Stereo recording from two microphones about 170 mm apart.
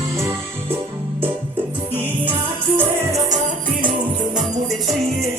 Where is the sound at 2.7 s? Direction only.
20° right (ahead or behind).